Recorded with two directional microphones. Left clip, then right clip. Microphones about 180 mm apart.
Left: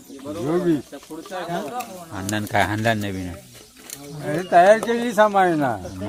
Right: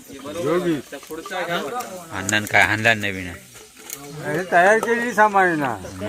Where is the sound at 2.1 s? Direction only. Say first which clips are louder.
Right 5 dB; 20° left (ahead or behind).